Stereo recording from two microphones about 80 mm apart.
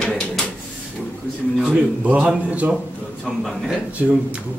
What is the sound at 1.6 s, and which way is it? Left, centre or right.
A man's voice, centre.